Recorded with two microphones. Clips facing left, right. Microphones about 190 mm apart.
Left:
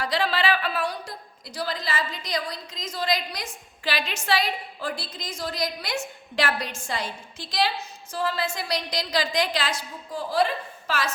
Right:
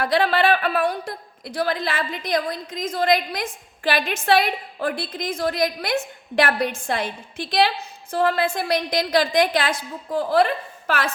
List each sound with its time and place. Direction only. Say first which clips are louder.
0.0 s a woman's voice: right 6 dB; 55° right (ahead or behind)